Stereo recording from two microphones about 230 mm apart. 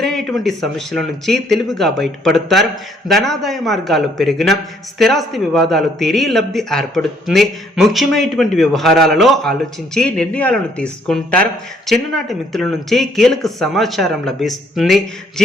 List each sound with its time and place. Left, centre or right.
0.0 s a man's voice: centre